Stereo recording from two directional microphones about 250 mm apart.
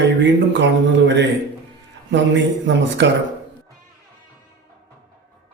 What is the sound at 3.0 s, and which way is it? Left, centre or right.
Speech, right.